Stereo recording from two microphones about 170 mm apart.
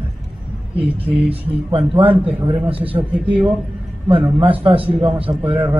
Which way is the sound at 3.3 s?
10° right (ahead or behind).